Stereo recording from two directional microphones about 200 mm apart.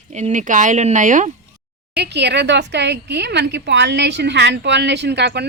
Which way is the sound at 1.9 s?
55° right (ahead or behind).